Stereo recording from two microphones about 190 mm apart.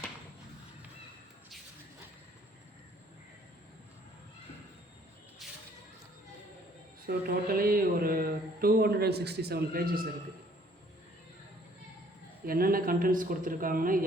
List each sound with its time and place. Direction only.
5.4 s a sound: centre (ahead or behind)
7.3 s a man's voice: 50° right (ahead or behind)
12.5 s speech: 50° right (ahead or behind)